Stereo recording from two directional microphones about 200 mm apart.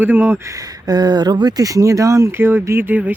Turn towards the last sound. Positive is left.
turn(degrees=-10)  # may be behind; listen again after turning